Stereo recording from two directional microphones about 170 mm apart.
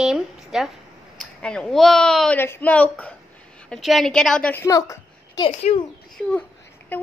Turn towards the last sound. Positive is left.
turn(degrees=10)  # may be behind; listen again after turning